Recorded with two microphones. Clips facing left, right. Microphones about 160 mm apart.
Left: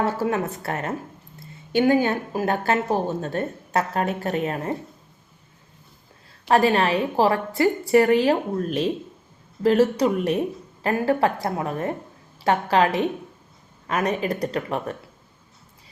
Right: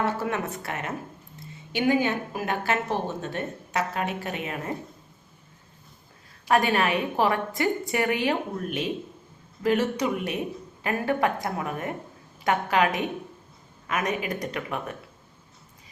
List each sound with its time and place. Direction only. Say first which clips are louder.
0.0 s a woman's voice: left 4 dB; 35° left (ahead or behind)
6.5 s a woman's voice: left 4 dB; 30° left (ahead or behind)